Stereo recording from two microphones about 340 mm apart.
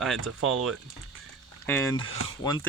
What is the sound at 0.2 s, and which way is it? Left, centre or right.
Speech, right.